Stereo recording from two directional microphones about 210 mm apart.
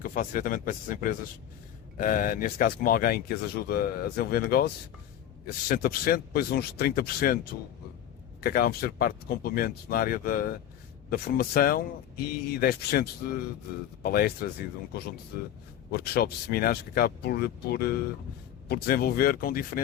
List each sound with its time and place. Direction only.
0.0 s speech: 40° left (ahead or behind)
8.4 s speech: 45° left (ahead or behind)